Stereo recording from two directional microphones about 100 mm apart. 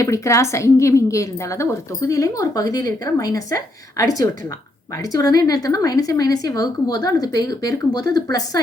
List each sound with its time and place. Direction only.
0.0 s a woman's voice: 30° left (ahead or behind)